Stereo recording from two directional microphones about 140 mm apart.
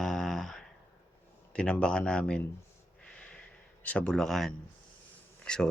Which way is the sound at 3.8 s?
10° left (ahead or behind).